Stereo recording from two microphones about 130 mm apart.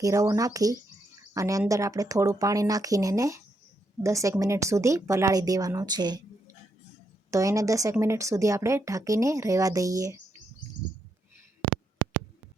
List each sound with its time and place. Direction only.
0.0 s a woman's voice: 25° right (ahead or behind)
7.3 s a woman's voice: 25° right (ahead or behind)